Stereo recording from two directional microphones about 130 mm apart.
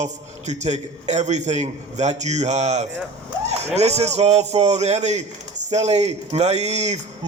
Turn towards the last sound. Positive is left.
turn(degrees=-60)  # may be behind; listen again after turning